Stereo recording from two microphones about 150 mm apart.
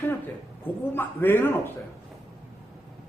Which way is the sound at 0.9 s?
15° left (ahead or behind).